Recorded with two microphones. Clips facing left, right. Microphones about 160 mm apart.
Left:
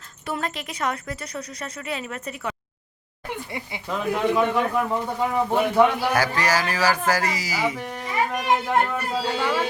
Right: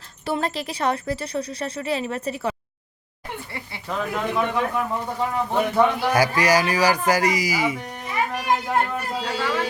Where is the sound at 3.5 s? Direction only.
15° left (ahead or behind).